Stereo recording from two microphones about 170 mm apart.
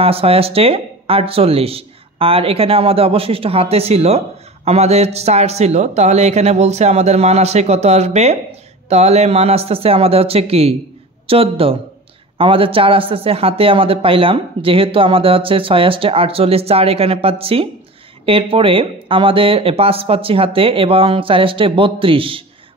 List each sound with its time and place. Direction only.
0.0 s speech: 35° right (ahead or behind)